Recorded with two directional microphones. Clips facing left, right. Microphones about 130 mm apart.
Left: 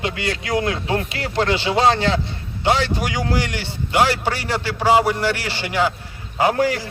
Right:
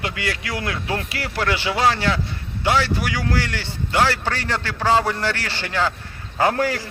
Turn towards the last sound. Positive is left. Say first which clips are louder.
# left 2 dB
turn(degrees=20)  # may be behind; listen again after turning